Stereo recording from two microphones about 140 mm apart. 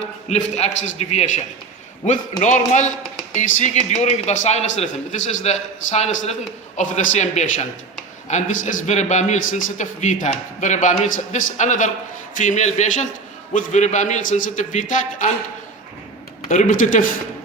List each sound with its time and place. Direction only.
0.3 s a man's voice: 55° left (ahead or behind)
16.5 s a man's voice: 65° left (ahead or behind)